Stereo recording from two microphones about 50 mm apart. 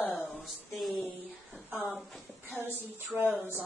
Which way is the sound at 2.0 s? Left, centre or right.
Centre.